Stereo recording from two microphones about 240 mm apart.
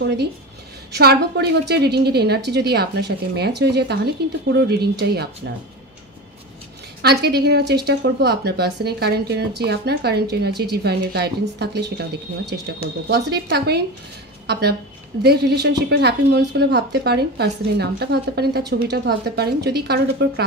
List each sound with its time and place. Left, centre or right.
0.9 s speech: right
7.0 s speech: right